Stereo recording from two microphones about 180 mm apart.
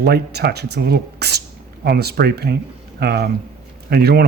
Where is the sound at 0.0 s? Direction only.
65° right (ahead or behind).